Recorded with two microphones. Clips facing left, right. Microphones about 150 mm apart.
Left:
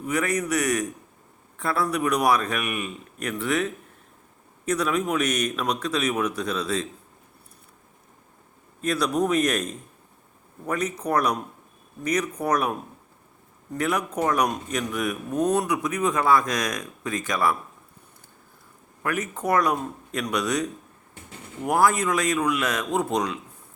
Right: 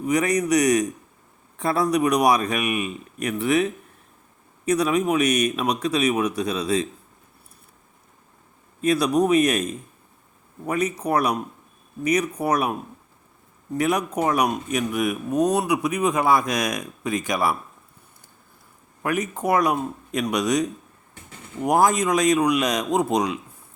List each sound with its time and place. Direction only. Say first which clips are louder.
0.0 s speech: right 4 dB; 15° right (ahead or behind)
8.8 s speech: right 4 dB; 10° right (ahead or behind)
13.7 s speech: right 3 dB; 15° right (ahead or behind)
19.0 s speech: right 3 dB; 15° right (ahead or behind)